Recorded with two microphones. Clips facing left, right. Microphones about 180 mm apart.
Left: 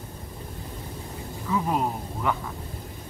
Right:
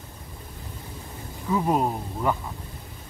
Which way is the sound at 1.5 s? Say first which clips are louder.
Right 3 dB; 35° right (ahead or behind).